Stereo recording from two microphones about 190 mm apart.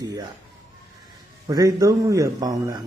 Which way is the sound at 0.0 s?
20° right (ahead or behind).